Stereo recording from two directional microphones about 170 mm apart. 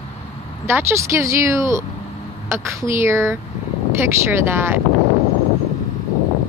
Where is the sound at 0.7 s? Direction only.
15° right (ahead or behind).